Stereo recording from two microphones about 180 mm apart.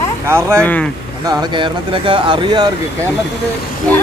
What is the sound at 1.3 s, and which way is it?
Speech, 25° right (ahead or behind).